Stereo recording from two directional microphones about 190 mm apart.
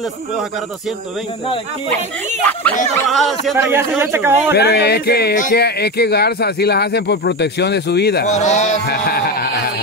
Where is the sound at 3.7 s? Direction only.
10° right (ahead or behind).